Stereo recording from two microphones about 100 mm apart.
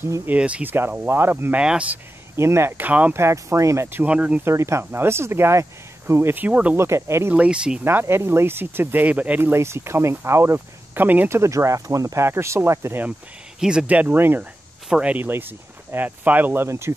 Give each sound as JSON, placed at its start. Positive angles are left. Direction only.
{"t": 0.3, "sound": "speech", "side_deg": -15}
{"t": 1.6, "sound": "speech", "side_deg": -10}
{"t": 2.3, "sound": "speech", "side_deg": -25}
{"t": 2.8, "sound": "speech", "side_deg": -15}
{"t": 3.2, "sound": "speech", "side_deg": -30}
{"t": 4.0, "sound": "speech", "side_deg": -10}
{"t": 4.5, "sound": "speech", "side_deg": -25}
{"t": 6.8, "sound": "speech", "side_deg": -25}
{"t": 7.3, "sound": "speech", "side_deg": -10}
{"t": 7.8, "sound": "speech", "side_deg": -25}
{"t": 13.6, "sound": "speech", "side_deg": -10}